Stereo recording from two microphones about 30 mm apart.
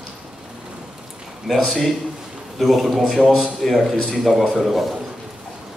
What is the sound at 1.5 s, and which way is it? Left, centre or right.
Speech, right.